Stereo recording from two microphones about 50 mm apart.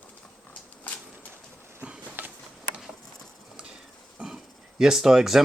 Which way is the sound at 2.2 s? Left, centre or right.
Right.